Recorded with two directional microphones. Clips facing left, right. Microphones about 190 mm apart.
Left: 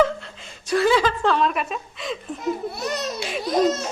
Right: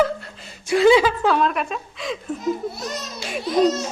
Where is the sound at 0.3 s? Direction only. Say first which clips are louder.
Right 2 dB; 5° right (ahead or behind).